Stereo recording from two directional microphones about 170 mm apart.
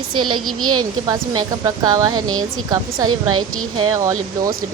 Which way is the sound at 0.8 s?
25° right (ahead or behind).